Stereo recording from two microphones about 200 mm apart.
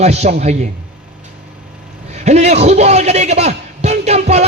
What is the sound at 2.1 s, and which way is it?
A man's voice, 35° right (ahead or behind).